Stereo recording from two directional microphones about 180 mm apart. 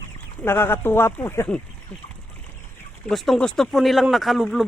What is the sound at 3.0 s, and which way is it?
Speech, centre (ahead or behind).